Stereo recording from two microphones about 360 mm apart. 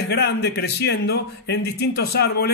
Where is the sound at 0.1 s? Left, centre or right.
Left.